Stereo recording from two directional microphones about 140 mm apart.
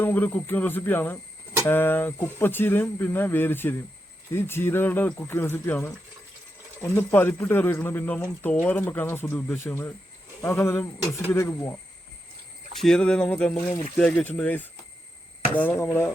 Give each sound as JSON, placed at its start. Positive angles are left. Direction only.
{"t": 0.0, "sound": "speech", "side_deg": 15}
{"t": 12.7, "sound": "speech", "side_deg": 5}